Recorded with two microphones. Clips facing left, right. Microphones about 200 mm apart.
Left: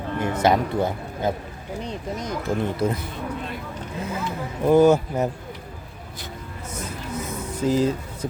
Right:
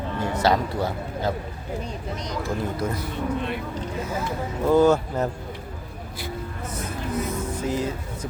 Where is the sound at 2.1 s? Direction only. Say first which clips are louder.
Left 2 dB; 50° left (ahead or behind).